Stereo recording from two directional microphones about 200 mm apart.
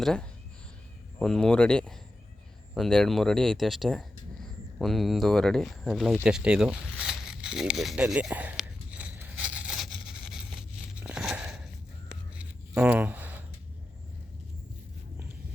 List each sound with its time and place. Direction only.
0.0 s speech: 5° left (ahead or behind)
6.2 s zipper: 5° right (ahead or behind)
12.4 s a sound: 5° right (ahead or behind)